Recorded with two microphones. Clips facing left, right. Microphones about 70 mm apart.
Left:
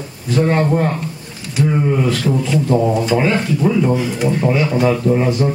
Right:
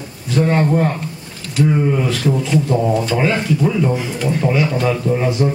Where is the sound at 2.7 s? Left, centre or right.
Centre.